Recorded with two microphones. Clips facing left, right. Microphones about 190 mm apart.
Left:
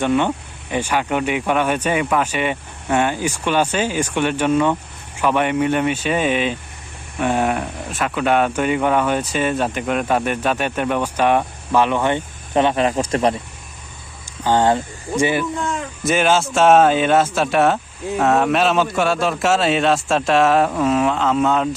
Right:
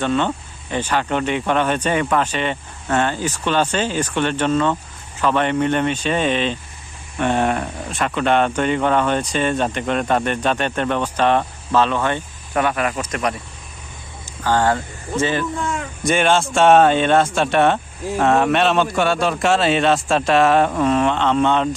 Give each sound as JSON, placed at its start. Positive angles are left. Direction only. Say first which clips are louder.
{"t": 0.0, "sound": "speech", "louder": "left 2 dB", "side_deg": 15}
{"t": 14.4, "sound": "speech", "louder": "left 2 dB", "side_deg": 20}